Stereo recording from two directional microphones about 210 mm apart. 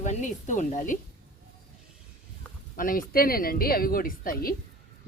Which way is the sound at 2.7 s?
40° left (ahead or behind).